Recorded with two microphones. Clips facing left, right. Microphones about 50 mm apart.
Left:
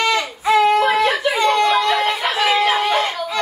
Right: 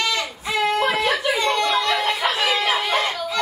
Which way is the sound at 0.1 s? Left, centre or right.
Centre.